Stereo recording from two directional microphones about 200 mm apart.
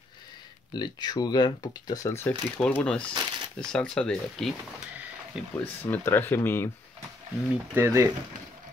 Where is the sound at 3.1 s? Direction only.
20° right (ahead or behind).